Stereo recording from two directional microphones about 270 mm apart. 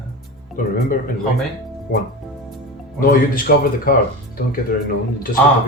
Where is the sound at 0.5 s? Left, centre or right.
Left.